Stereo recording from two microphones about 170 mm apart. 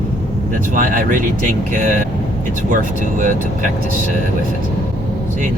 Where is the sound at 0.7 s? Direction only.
50° right (ahead or behind).